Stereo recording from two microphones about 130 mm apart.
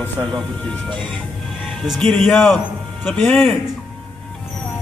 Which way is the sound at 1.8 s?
5° left (ahead or behind).